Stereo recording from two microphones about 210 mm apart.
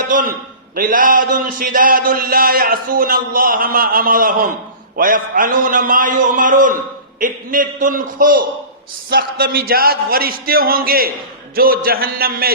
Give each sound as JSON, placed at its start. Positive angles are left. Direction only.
{"t": 0.1, "sound": "a man's voice", "side_deg": -40}